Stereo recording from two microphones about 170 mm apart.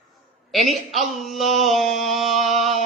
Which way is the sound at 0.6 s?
40° right (ahead or behind).